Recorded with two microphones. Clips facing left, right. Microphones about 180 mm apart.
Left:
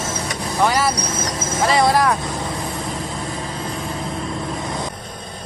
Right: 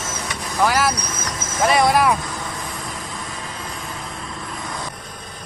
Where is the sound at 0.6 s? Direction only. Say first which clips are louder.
Even; centre (ahead or behind).